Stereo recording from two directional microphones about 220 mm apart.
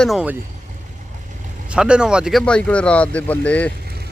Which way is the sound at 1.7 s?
5° right (ahead or behind).